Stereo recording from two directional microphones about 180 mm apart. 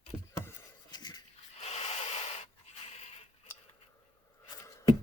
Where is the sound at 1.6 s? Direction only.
35° left (ahead or behind).